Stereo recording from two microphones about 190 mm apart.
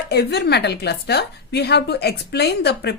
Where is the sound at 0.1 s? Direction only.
60° left (ahead or behind).